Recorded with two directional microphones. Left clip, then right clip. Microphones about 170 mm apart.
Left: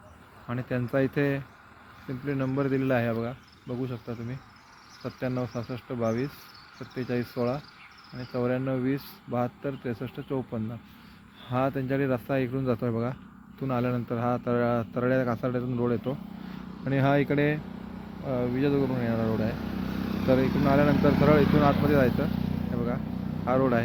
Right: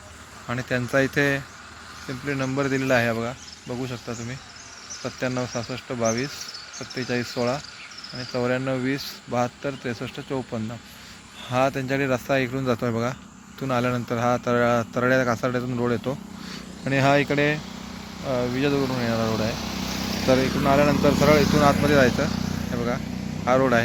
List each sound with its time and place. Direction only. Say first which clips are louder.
0.4 s speech: right 6 dB; centre (ahead or behind)
19.5 s vehicle: right 5 dB; 45° left (ahead or behind)
20.2 s speech: right 4 dB; centre (ahead or behind)
22.3 s vehicle: right 4 dB; 40° right (ahead or behind)
23.5 s speech: right 6 dB; 5° right (ahead or behind)